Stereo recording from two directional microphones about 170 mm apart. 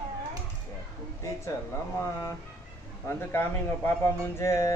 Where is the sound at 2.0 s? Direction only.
15° left (ahead or behind).